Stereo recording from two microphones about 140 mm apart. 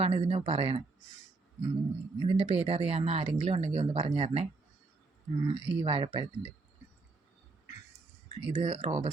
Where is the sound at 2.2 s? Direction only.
45° right (ahead or behind).